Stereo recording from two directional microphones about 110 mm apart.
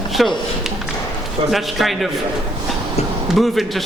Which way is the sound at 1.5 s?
Centre (ahead or behind).